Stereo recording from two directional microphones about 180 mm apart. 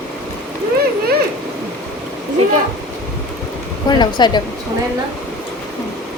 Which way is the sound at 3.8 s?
25° left (ahead or behind).